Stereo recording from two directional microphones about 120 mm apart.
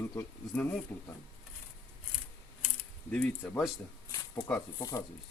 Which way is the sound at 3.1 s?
10° left (ahead or behind).